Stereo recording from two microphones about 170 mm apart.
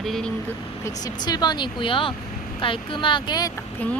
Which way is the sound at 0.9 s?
20° left (ahead or behind).